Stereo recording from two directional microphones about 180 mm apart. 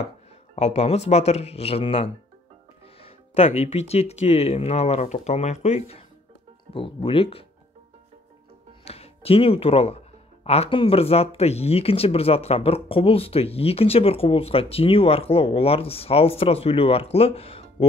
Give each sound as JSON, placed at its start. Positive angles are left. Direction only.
{"t": 0.6, "sound": "speech", "side_deg": 35}
{"t": 8.8, "sound": "speech", "side_deg": 35}